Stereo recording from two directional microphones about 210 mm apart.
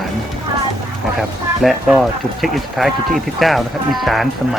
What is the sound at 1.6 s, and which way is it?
Speech, centre (ahead or behind).